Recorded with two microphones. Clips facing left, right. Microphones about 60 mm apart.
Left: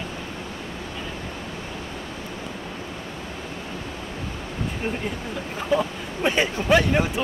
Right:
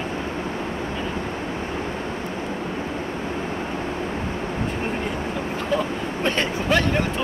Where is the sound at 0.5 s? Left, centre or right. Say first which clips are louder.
Right 6 dB; right.